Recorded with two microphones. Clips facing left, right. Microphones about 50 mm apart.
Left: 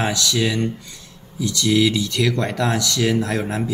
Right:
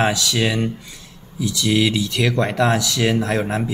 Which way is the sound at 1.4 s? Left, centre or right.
Centre.